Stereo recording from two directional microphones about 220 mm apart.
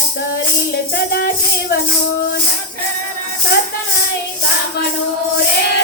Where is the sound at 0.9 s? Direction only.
45° left (ahead or behind).